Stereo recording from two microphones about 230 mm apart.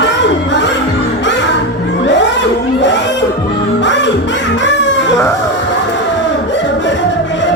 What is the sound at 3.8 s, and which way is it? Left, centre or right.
Music, left.